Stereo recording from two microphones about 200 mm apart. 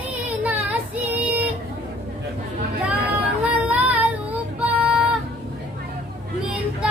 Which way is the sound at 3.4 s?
5° right (ahead or behind).